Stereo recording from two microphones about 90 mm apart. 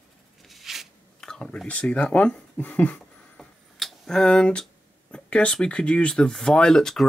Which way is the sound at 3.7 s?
5° left (ahead or behind).